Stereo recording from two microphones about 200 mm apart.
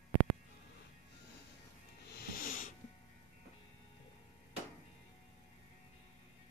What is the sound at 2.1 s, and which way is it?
Music, 50° left (ahead or behind).